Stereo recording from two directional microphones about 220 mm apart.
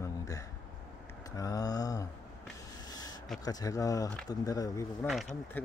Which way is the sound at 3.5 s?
15° left (ahead or behind).